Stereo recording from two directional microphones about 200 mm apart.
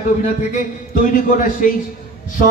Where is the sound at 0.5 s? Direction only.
40° left (ahead or behind).